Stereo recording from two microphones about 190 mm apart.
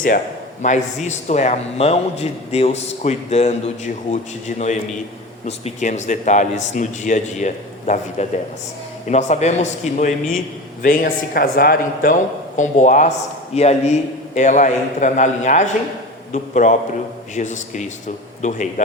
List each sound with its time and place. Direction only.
0.6 s a man's voice: 40° left (ahead or behind)
10.8 s a man's voice: 50° left (ahead or behind)